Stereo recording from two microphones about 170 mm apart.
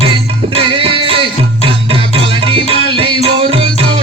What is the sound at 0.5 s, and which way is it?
Music, 35° right (ahead or behind).